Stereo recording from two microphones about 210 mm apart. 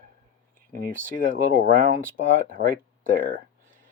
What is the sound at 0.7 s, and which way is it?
Speech, 40° right (ahead or behind).